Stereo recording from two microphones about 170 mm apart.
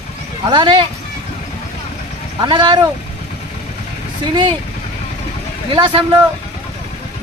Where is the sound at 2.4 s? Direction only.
25° right (ahead or behind).